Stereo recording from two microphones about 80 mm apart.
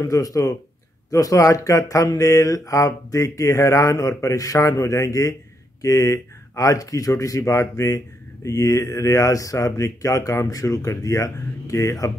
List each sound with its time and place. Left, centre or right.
0.0 s speech: left